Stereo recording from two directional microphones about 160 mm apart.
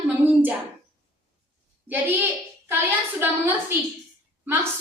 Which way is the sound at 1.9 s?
10° right (ahead or behind).